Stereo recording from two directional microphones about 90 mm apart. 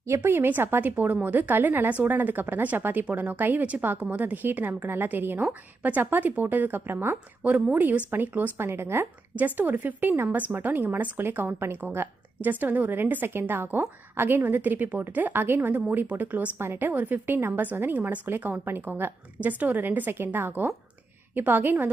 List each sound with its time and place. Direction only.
0.0 s speech: 30° right (ahead or behind)